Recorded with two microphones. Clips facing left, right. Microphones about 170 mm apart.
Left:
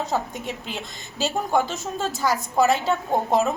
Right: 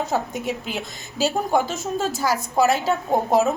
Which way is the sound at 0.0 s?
5° right (ahead or behind).